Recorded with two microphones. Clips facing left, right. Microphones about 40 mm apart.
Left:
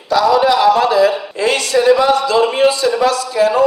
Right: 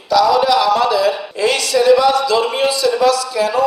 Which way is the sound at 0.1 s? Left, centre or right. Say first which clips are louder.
Even; left.